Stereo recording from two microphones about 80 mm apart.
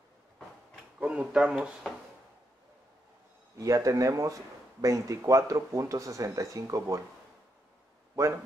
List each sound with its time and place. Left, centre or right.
0.9 s speech: centre
3.5 s speech: right